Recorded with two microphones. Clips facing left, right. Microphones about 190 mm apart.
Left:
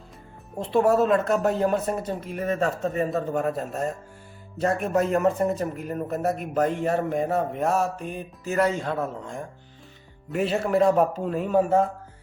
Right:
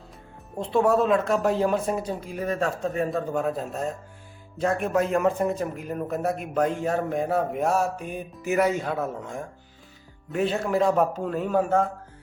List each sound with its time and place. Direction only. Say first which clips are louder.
0.5 s speech: left 1 dB; 5° left (ahead or behind)